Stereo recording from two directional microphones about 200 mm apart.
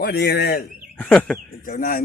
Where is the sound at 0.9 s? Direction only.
5° left (ahead or behind).